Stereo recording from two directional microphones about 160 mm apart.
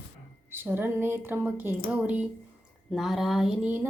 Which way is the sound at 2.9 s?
Centre (ahead or behind).